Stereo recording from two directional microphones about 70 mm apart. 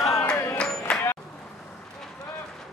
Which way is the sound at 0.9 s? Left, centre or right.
Centre.